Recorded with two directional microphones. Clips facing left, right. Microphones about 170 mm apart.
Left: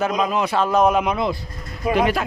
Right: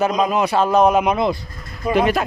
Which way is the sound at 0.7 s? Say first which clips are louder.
Right 2 dB; centre (ahead or behind).